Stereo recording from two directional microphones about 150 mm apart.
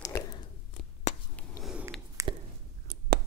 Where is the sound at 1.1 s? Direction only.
50° left (ahead or behind).